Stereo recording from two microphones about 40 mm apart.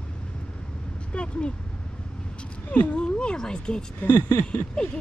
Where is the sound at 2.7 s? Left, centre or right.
Left.